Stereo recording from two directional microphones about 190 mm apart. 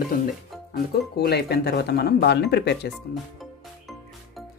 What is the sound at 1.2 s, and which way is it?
Speech, 60° left (ahead or behind).